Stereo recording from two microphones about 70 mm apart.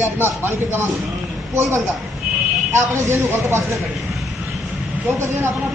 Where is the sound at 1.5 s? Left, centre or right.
Right.